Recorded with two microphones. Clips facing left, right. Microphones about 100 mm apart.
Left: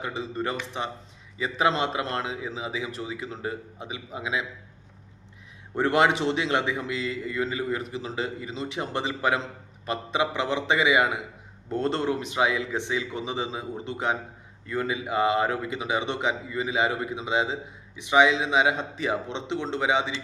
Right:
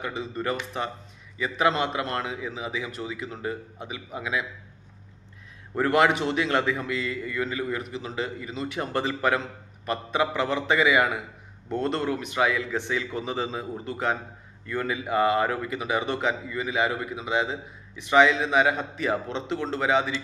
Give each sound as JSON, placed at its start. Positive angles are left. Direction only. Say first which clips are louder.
{"t": 0.0, "sound": "a man's voice", "louder": "even", "side_deg": 30}
{"t": 5.7, "sound": "a man's voice", "louder": "even", "side_deg": 25}